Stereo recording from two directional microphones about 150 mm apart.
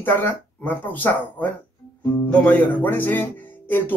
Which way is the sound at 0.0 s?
15° left (ahead or behind).